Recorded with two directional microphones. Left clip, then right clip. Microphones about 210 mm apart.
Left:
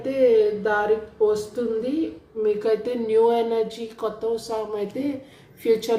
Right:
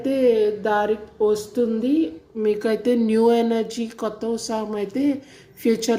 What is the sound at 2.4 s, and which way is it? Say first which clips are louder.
A woman's voice: right 1 dB; 40° right (ahead or behind).